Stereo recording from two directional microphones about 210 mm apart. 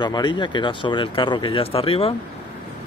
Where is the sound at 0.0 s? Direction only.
20° left (ahead or behind).